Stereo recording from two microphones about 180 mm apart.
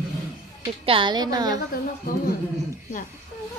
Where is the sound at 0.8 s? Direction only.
30° right (ahead or behind).